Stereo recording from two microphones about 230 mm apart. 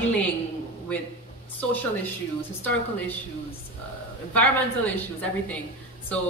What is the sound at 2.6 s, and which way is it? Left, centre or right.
Speech, centre.